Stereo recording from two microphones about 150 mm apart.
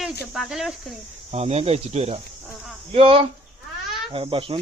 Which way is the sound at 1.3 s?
45° right (ahead or behind).